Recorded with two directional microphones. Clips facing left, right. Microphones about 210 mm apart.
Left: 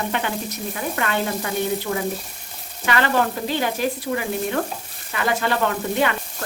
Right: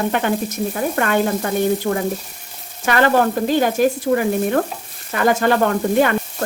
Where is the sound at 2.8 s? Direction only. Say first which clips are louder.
Right 5 dB; 45° right (ahead or behind).